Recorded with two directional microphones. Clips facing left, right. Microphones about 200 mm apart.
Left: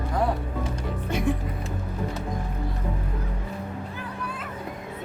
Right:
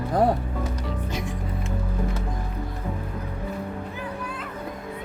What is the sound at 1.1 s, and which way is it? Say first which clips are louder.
Music: left 6 dB; 55° left (ahead or behind).